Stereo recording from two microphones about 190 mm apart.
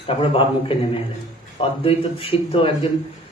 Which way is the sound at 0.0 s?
30° left (ahead or behind).